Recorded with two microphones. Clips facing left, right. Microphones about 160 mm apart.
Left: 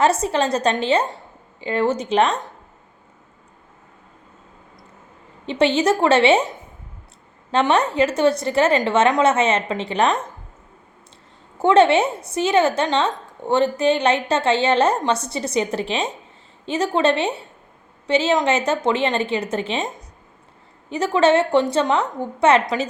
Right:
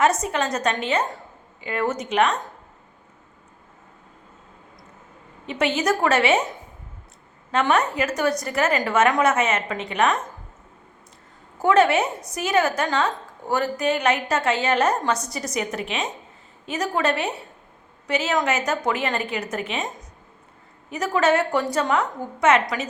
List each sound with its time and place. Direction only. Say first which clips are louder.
0.0 s a woman's voice: left 3 dB; 30° left (ahead or behind)
5.5 s a woman's voice: left 5 dB; 30° left (ahead or behind)
7.5 s a woman's voice: left 3 dB; 30° left (ahead or behind)
11.6 s a woman's voice: left 3 dB; 30° left (ahead or behind)
20.9 s a woman's voice: left 4 dB; 30° left (ahead or behind)